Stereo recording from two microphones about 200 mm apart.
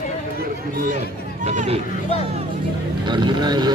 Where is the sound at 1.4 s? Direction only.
35° right (ahead or behind).